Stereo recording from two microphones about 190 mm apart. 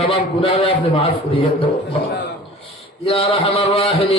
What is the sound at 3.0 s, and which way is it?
Mantra, 30° left (ahead or behind).